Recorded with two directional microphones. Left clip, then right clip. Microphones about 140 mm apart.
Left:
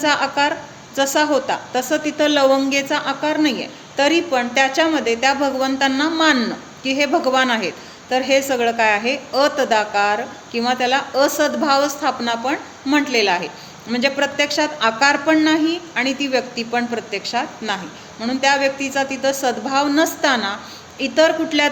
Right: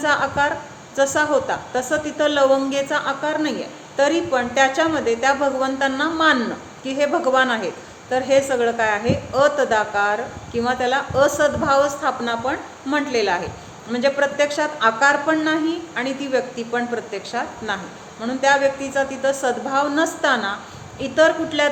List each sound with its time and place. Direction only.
0.0 s a woman's voice: 45° left (ahead or behind)